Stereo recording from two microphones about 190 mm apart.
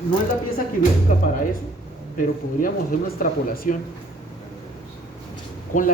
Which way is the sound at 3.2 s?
50° left (ahead or behind).